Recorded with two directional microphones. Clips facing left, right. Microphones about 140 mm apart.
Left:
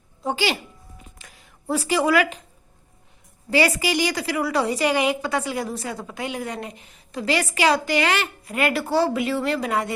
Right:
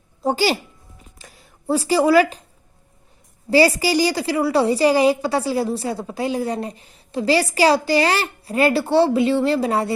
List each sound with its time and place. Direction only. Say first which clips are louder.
0.2 s speech: right 5 dB; 35° right (ahead or behind)
3.5 s a woman's voice: right 5 dB; 35° right (ahead or behind)